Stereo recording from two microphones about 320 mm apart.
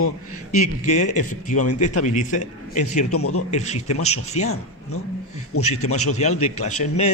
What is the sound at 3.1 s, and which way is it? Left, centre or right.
Speech, left.